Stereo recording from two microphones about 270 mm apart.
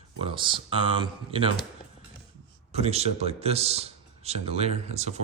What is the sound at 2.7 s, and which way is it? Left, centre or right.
Speech, right.